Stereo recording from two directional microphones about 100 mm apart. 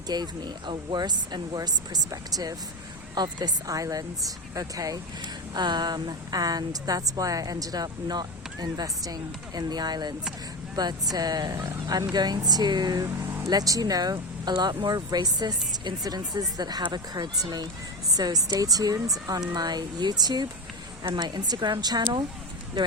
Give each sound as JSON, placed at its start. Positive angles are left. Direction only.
{"t": 0.1, "sound": "a woman's voice", "side_deg": -45}